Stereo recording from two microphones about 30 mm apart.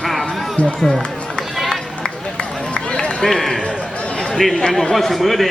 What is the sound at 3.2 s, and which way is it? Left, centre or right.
Speech, centre.